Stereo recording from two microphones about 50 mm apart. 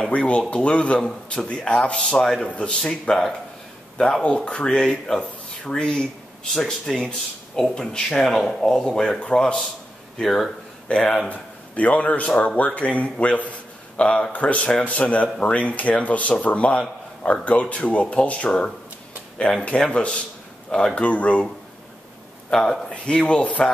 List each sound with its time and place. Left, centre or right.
0.1 s a man's voice: left; by 8.8 s centre
8.8 s speech: centre
10.9 s speech: centre
11.2 s a man's voice: left
22.5 s a man's voice: centre